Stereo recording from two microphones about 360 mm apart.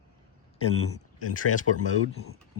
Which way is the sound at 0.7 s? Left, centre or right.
Left.